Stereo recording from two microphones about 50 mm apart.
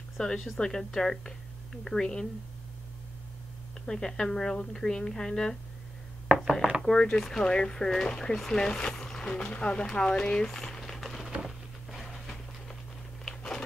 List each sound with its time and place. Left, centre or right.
0.2 s speech: centre
3.8 s speech: centre
6.4 s speech: centre
6.8 s speech: centre
10.4 s crumpling: centre
11.4 s a sound: centre
13.3 s a sound: centre